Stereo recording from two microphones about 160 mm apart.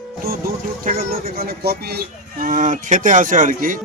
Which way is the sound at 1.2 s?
70° right (ahead or behind).